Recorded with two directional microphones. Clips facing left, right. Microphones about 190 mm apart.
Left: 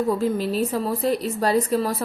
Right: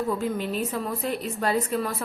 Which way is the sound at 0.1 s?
35° left (ahead or behind).